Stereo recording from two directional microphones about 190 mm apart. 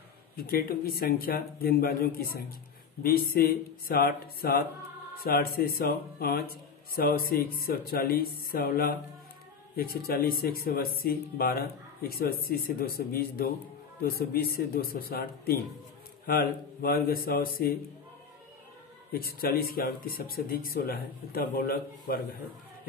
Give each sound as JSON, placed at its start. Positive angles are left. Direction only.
{"t": 0.4, "sound": "speech", "side_deg": 50}
{"t": 19.1, "sound": "speech", "side_deg": 50}